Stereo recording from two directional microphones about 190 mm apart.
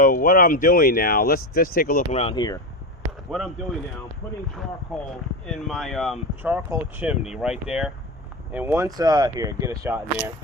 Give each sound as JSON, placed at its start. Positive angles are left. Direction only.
{"t": 0.0, "sound": "speech", "side_deg": 45}
{"t": 2.1, "sound": "speech", "side_deg": 30}
{"t": 3.3, "sound": "speech", "side_deg": 0}
{"t": 4.9, "sound": "speech", "side_deg": 0}